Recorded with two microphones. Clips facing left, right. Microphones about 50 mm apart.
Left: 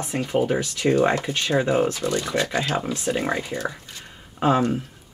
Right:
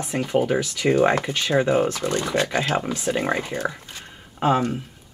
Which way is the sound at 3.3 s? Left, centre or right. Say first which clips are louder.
Right 1 dB; right.